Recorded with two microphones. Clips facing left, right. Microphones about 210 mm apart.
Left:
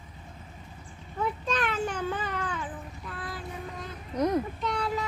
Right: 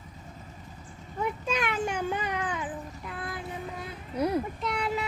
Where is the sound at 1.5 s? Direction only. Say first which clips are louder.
Right 1 dB; 10° right (ahead or behind).